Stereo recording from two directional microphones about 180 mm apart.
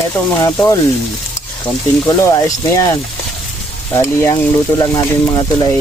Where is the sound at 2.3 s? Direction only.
20° left (ahead or behind).